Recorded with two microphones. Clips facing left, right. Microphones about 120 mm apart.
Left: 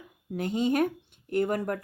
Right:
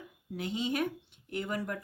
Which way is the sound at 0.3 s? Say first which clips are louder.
Left 7 dB; 50° left (ahead or behind).